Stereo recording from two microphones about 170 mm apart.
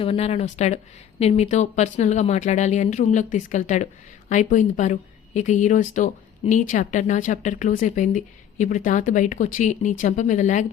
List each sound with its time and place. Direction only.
0.0 s a woman's voice: 35° left (ahead or behind)